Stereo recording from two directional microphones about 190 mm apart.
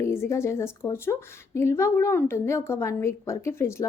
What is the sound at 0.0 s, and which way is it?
Speech, 15° left (ahead or behind).